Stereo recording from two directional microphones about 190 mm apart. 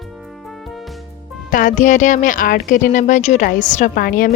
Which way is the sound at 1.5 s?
45° left (ahead or behind).